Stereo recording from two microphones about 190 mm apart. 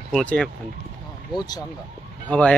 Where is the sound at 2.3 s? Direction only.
5° left (ahead or behind).